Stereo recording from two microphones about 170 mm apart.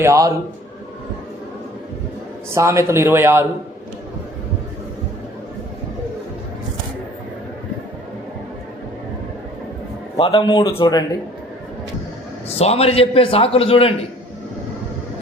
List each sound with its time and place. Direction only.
0.0 s a man's voice: 15° right (ahead or behind)
2.6 s a man's voice: 15° right (ahead or behind)
10.2 s speech: 35° left (ahead or behind)
12.5 s a man's voice: 35° left (ahead or behind)